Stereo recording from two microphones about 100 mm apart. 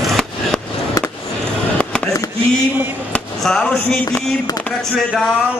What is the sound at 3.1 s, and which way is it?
Speech, 10° left (ahead or behind).